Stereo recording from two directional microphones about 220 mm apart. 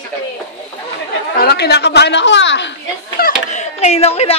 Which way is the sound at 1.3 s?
45° left (ahead or behind).